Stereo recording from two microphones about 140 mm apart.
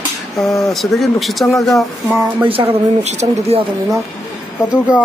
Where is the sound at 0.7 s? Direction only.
Centre (ahead or behind).